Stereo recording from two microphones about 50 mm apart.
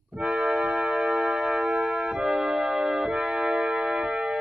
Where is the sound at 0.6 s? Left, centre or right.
Centre.